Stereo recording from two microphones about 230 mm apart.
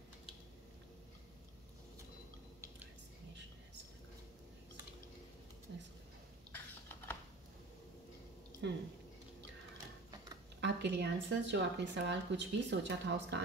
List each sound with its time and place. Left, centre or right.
5.7 s a sound: right
8.6 s speech: right
10.6 s speech: right